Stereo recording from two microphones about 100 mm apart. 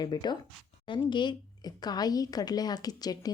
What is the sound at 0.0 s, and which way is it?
A woman's voice, 45° left (ahead or behind).